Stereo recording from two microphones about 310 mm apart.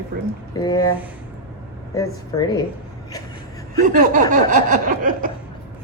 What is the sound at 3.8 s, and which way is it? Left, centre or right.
A woman's voice, right.